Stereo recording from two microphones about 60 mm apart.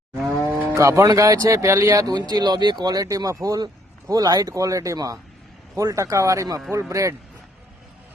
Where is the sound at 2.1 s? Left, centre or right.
Right.